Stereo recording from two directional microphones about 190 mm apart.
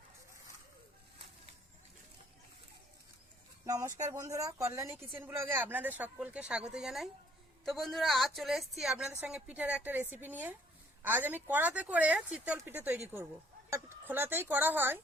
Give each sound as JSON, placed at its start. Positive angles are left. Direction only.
{"t": 3.7, "sound": "a woman's voice", "side_deg": -15}